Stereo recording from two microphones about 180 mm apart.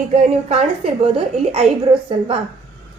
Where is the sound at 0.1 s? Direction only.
35° right (ahead or behind).